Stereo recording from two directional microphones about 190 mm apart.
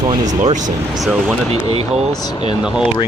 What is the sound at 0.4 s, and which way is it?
Speech, 40° right (ahead or behind).